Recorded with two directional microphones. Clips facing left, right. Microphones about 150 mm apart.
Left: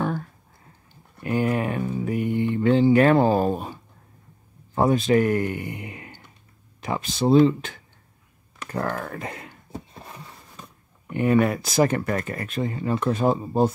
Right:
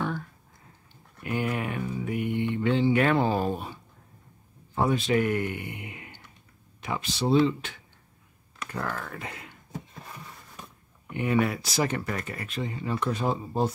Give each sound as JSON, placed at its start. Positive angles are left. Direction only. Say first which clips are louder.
{"t": 1.2, "sound": "music", "louder": "left 6 dB", "side_deg": 35}
{"t": 4.7, "sound": "speech", "louder": "left 5 dB", "side_deg": 45}
{"t": 11.1, "sound": "speech", "louder": "left 6 dB", "side_deg": 50}